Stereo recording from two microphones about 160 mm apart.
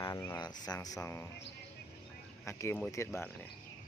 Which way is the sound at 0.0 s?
20° left (ahead or behind).